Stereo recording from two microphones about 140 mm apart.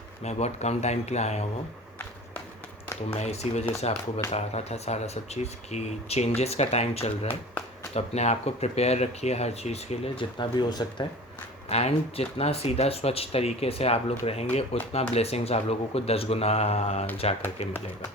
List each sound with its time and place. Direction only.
0.3 s speech: 50° left (ahead or behind)
3.1 s speech: 50° left (ahead or behind)
10.3 s speech: 35° left (ahead or behind)
11.7 s speech: 50° left (ahead or behind)